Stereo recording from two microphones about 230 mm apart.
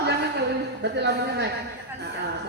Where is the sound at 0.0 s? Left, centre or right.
Right.